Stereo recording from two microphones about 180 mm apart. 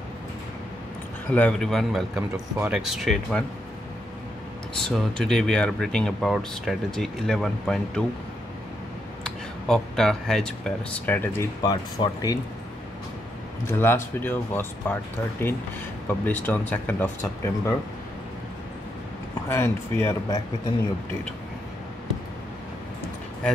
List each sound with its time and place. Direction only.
1.3 s speech: 5° left (ahead or behind)
4.8 s speech: 5° left (ahead or behind)
9.2 s speech: 5° left (ahead or behind)
11.7 s speech: 20° left (ahead or behind)
13.7 s speech: 15° left (ahead or behind)
16.1 s speech: 10° left (ahead or behind)
19.5 s speech: 15° left (ahead or behind)